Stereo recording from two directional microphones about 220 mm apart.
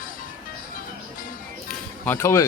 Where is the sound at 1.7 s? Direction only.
10° left (ahead or behind).